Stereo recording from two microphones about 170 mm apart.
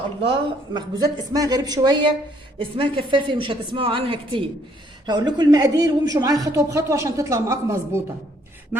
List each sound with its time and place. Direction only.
0.2 s a woman's voice: 30° right (ahead or behind)